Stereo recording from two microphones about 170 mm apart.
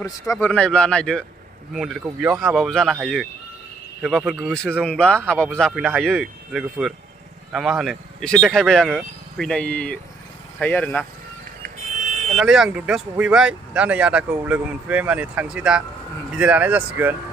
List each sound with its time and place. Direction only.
0.0 s speech: 20° left (ahead or behind)
0.5 s speech: 5° left (ahead or behind)
11.6 s buzzer: 50° right (ahead or behind)
12.4 s speech: 5° right (ahead or behind)